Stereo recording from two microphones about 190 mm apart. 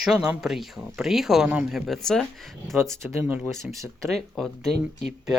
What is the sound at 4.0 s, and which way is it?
Speech, centre (ahead or behind).